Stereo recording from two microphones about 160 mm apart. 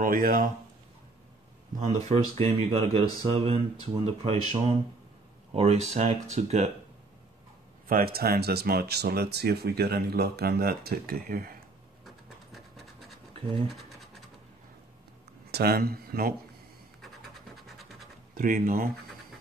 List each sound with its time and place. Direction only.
0.0 s speech: 65° right (ahead or behind)
1.8 s speech: 55° right (ahead or behind)
2.3 s speech: 35° right (ahead or behind)
5.5 s speech: 40° right (ahead or behind)
7.9 s speech: 70° right (ahead or behind)
12.5 s scratch: centre (ahead or behind)
15.5 s speech: 75° right (ahead or behind)
17.0 s scratch: centre (ahead or behind)
18.3 s speech: 55° right (ahead or behind)